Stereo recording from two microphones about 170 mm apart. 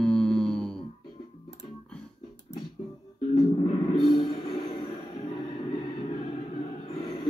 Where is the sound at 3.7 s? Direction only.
35° left (ahead or behind).